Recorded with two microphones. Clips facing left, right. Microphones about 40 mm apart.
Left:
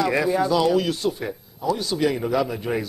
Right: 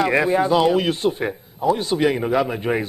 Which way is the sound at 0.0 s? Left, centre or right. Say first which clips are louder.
Right 3 dB; right.